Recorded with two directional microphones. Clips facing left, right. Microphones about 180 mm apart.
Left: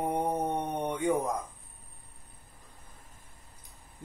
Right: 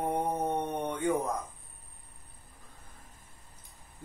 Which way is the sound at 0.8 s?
15° left (ahead or behind).